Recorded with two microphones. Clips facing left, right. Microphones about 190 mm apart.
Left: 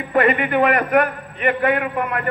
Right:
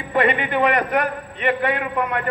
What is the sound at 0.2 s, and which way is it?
Speech, 30° right (ahead or behind).